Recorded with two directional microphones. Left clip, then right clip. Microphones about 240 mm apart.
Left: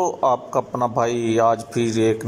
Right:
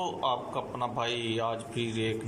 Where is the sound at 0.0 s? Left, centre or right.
Left.